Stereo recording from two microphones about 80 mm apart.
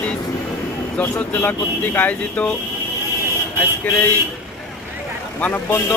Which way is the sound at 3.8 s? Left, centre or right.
Left.